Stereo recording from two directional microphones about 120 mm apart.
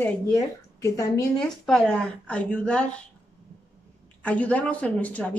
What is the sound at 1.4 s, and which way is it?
Speech, 5° left (ahead or behind).